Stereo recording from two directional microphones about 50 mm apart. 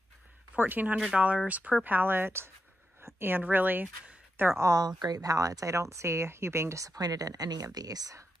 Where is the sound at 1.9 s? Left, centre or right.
Right.